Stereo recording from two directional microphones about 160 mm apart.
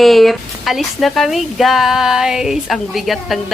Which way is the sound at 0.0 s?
Centre (ahead or behind).